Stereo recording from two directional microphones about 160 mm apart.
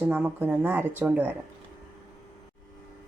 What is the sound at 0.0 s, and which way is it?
A woman's voice, 10° right (ahead or behind).